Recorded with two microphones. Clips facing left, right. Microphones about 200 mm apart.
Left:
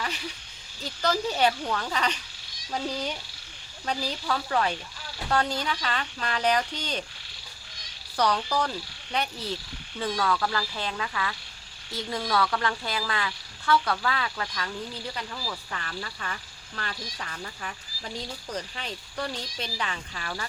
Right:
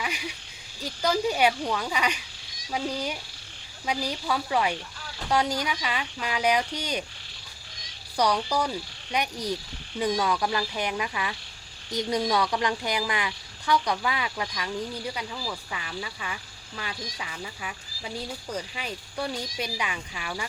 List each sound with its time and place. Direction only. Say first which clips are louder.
0.0 s speech: right 1 dB; 10° right (ahead or behind)
8.1 s speech: right 1 dB; 10° right (ahead or behind)